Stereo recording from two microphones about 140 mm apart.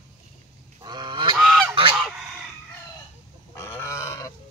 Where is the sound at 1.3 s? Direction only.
Centre (ahead or behind).